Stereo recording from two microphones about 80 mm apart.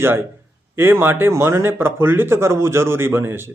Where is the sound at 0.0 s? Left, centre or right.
Right.